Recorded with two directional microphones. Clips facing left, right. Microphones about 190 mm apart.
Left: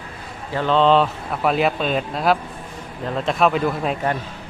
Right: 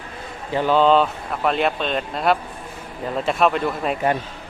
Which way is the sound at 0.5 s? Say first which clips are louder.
Even; 10° right (ahead or behind).